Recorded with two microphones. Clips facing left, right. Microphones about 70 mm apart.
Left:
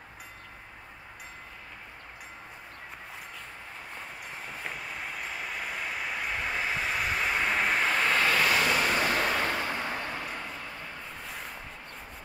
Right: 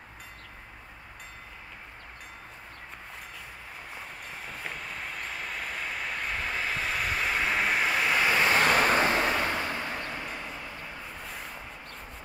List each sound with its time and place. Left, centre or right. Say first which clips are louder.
4.5 s vehicle: even; centre
8.5 s vehicle: right 3 dB; right
9.8 s vehicle: left 1 dB; centre
11.2 s a sound: left 1 dB; centre